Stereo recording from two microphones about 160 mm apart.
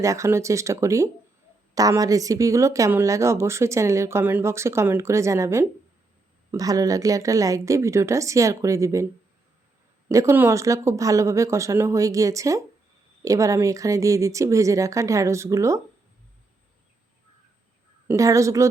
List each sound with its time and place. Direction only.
0.0 s a woman's voice: 20° right (ahead or behind)
10.1 s a woman's voice: 20° right (ahead or behind)
18.1 s a woman's voice: 20° right (ahead or behind)